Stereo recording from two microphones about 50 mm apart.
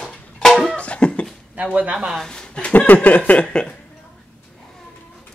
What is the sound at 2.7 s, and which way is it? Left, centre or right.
Speech, left.